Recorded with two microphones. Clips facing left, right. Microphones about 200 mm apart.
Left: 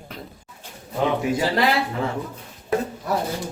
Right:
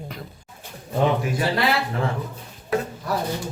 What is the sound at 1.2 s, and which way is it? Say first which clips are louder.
Speech: left 3 dB; 20° left (ahead or behind).